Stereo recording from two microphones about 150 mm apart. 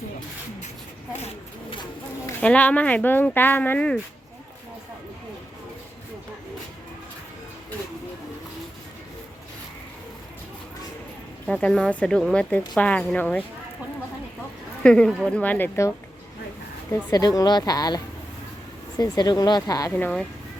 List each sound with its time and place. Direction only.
1.7 s a sound: 30° left (ahead or behind)
2.4 s a woman's voice: 10° left (ahead or behind)
11.4 s a woman's voice: 5° left (ahead or behind)
14.8 s a woman's voice: 5° left (ahead or behind)
17.1 s a woman's voice: 25° left (ahead or behind)
20.0 s a woman's voice: 10° left (ahead or behind)